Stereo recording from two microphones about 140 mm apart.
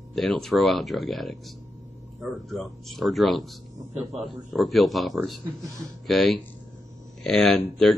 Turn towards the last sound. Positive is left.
turn(degrees=0)  # may be behind; listen again after turning